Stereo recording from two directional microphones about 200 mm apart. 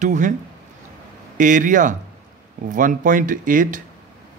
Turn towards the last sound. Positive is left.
turn(degrees=-40)  # may be behind; listen again after turning